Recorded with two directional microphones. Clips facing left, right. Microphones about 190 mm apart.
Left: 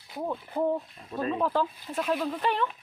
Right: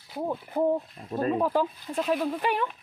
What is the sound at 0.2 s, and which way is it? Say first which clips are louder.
Speech: right 2 dB; 15° right (ahead or behind).